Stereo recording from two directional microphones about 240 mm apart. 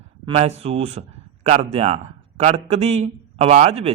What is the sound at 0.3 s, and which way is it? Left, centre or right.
A man's voice, right.